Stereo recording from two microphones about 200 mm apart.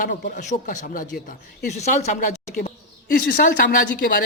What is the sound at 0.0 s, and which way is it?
Speech, 40° left (ahead or behind).